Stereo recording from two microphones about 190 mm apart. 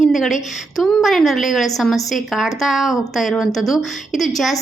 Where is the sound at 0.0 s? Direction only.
Centre (ahead or behind).